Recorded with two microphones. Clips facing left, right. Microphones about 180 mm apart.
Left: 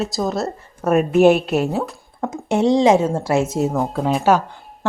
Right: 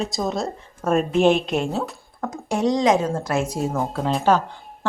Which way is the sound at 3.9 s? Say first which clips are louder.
Left 2 dB; 10° left (ahead or behind).